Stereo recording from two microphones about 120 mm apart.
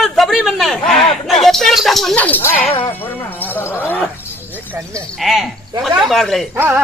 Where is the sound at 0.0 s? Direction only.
Centre (ahead or behind).